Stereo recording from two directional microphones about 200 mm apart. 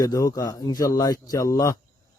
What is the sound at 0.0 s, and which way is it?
A man's voice, 15° left (ahead or behind).